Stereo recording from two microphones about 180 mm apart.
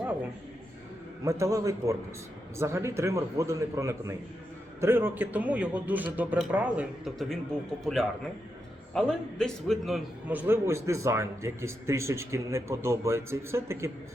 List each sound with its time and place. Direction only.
1.2 s a man's voice: 15° right (ahead or behind); by 7.3 s centre (ahead or behind)
8.9 s a man's voice: 5° left (ahead or behind); by 13.9 s 15° right (ahead or behind)